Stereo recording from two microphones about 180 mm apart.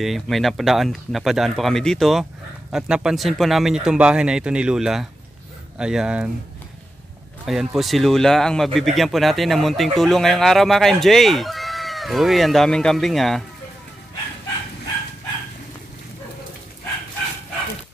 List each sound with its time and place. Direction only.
0.0 s speech: centre (ahead or behind)
7.4 s speech: centre (ahead or behind)